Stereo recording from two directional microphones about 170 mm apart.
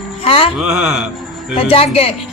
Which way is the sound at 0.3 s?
35° left (ahead or behind).